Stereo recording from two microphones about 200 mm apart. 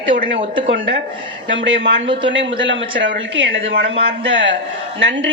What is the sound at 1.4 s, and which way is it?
Speech, 65° right (ahead or behind).